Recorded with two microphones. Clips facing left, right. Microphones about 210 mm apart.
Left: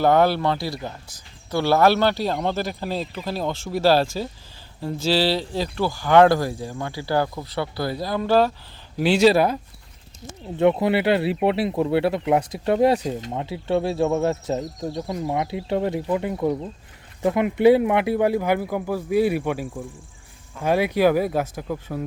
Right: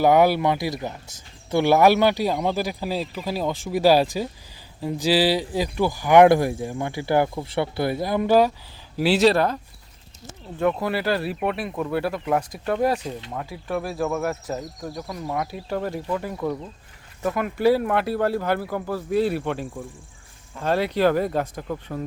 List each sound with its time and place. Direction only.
0.0 s speech: 10° right (ahead or behind)
2.2 s speech: centre (ahead or behind)
9.0 s speech: 5° right (ahead or behind)
10.4 s speech: 25° left (ahead or behind)
14.1 s speech: 20° left (ahead or behind)
14.8 s speech: centre (ahead or behind)
15.1 s speech: 20° left (ahead or behind)
19.6 s speech: centre (ahead or behind)
20.6 s speech: 15° left (ahead or behind)